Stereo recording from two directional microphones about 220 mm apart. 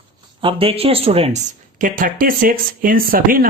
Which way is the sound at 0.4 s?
25° right (ahead or behind).